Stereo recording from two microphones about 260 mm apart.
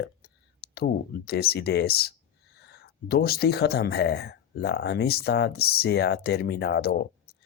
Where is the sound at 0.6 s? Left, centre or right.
Left.